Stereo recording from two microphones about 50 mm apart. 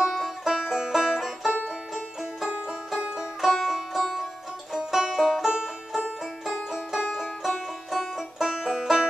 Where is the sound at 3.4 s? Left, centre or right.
Centre.